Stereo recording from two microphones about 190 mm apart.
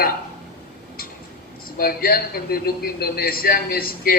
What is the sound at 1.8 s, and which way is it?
A man's voice, 50° left (ahead or behind).